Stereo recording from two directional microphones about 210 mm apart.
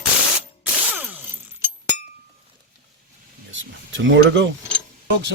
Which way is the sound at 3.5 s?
60° right (ahead or behind).